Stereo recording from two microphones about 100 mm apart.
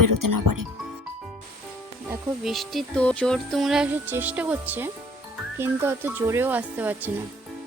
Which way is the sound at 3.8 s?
20° right (ahead or behind).